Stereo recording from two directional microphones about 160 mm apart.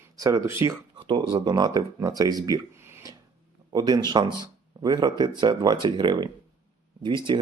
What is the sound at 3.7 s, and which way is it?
Speech, 25° right (ahead or behind).